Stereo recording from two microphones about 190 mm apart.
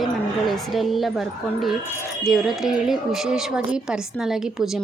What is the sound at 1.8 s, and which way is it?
Wind chime, 10° left (ahead or behind).